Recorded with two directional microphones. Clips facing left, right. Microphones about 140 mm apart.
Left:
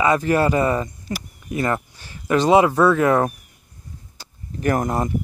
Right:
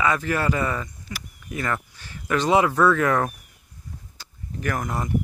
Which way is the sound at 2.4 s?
25° left (ahead or behind).